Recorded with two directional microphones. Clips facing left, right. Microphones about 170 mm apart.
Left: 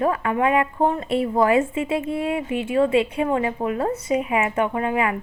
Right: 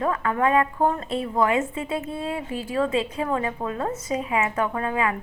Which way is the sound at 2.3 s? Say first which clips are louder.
Left 5 dB; 20° left (ahead or behind).